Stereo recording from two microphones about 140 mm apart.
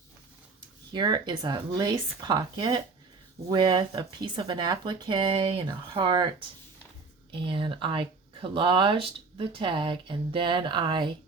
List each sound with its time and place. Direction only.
0.9 s speech: 30° right (ahead or behind)